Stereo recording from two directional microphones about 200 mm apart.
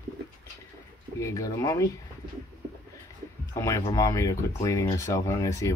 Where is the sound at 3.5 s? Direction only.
15° left (ahead or behind).